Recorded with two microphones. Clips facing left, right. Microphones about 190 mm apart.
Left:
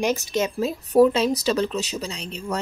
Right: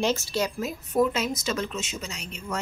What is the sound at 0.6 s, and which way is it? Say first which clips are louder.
Speech: left 9 dB; 30° left (ahead or behind).